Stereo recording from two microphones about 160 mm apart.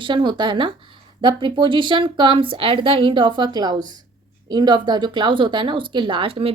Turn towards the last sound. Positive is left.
turn(degrees=-35)  # may be behind; listen again after turning